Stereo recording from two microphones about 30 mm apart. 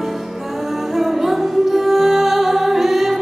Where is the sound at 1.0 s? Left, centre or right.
Centre.